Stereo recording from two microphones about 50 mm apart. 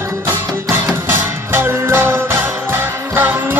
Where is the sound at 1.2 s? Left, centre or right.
Right.